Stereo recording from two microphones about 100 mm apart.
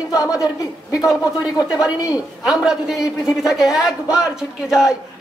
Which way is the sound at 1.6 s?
10° right (ahead or behind).